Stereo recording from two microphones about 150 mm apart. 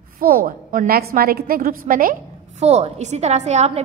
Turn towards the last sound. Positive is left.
turn(degrees=-45)  # may be behind; listen again after turning